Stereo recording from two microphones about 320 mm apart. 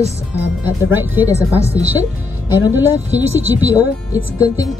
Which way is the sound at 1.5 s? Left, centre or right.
Centre.